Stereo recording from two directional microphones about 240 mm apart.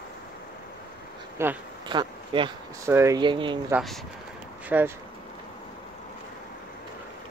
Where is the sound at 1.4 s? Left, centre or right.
Centre.